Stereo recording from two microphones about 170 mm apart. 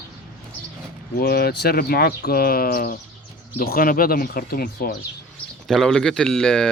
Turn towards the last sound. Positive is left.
turn(degrees=5)  # may be behind; listen again after turning